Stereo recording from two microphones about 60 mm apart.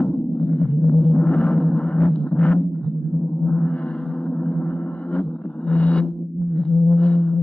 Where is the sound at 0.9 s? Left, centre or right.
Centre.